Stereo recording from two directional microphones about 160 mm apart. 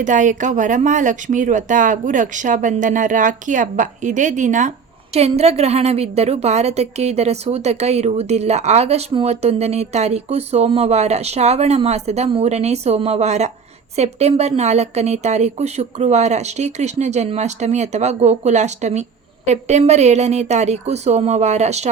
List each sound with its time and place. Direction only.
0.0 s a woman's voice: 50° right (ahead or behind)